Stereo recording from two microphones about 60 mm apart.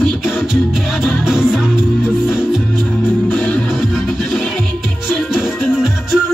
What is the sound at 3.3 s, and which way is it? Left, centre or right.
Music, left.